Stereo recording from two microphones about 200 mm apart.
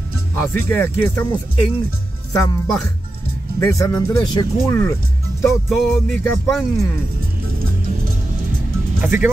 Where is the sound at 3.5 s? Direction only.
15° left (ahead or behind).